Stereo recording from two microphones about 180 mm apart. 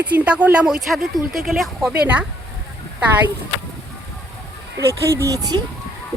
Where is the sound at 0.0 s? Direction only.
10° right (ahead or behind).